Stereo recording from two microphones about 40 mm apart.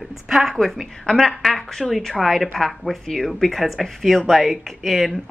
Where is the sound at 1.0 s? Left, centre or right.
Centre.